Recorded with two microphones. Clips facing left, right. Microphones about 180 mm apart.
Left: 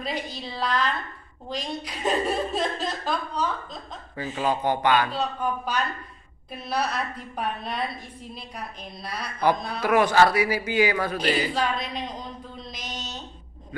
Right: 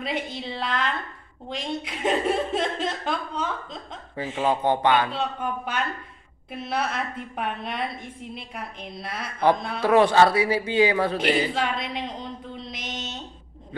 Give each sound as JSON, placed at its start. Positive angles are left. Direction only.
{"t": 0.0, "sound": "a woman's voice", "side_deg": -25}
{"t": 6.5, "sound": "a woman's voice", "side_deg": -25}
{"t": 12.5, "sound": "mantra", "side_deg": -25}